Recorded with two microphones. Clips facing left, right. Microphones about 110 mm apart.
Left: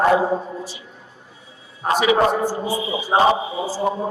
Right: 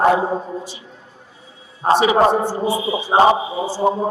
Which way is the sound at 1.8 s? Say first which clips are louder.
Right 3 dB; 35° right (ahead or behind).